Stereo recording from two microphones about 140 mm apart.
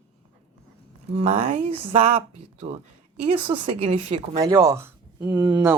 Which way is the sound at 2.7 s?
75° right (ahead or behind).